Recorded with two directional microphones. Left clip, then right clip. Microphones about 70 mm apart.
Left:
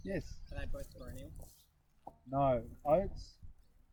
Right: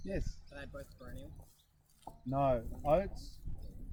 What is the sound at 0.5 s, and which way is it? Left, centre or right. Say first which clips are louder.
Speech: left 1 dB; left.